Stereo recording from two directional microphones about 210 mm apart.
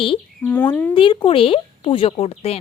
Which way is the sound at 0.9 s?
25° left (ahead or behind).